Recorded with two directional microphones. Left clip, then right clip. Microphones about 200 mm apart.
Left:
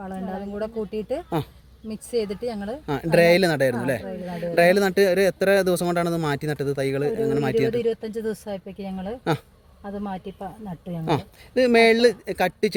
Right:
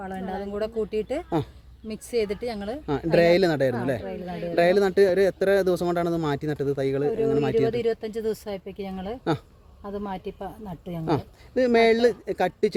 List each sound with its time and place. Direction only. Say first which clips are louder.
0.0 s speech: right 1 dB; 20° right (ahead or behind)
2.8 s speech: left 2 dB; centre (ahead or behind)
8.3 s speech: even; 15° right (ahead or behind)
9.3 s speech: left 2 dB; 10° left (ahead or behind)
9.8 s speech: even; 15° right (ahead or behind)
11.0 s speech: left 2 dB; 10° left (ahead or behind)